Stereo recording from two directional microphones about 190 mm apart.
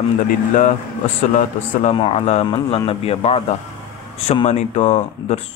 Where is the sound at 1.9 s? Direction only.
30° left (ahead or behind).